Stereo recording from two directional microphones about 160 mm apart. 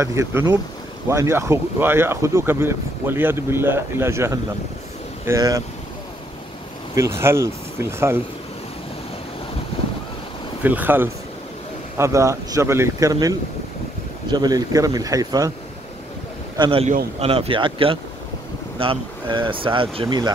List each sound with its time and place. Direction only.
0.0 s speech: 15° right (ahead or behind)
7.0 s speech: 15° right (ahead or behind)
9.7 s wind noise: 35° left (ahead or behind)
10.6 s speech: 10° right (ahead or behind)
16.5 s speech: 25° right (ahead or behind)